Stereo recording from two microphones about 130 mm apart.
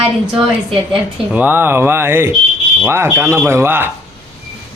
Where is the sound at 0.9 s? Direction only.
10° right (ahead or behind).